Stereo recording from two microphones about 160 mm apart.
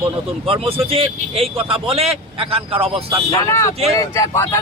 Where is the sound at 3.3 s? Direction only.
20° left (ahead or behind).